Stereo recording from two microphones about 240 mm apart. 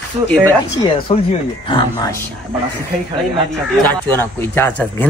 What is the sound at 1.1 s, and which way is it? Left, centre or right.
Speech, left.